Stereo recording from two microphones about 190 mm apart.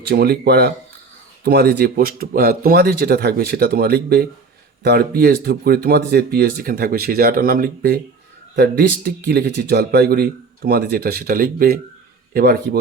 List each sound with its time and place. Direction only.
0.0 s a man's voice: 60° right (ahead or behind)